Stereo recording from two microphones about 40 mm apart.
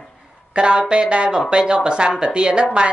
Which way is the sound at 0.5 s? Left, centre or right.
Right.